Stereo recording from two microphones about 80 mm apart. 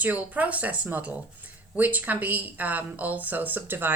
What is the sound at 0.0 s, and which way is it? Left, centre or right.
Speech, centre.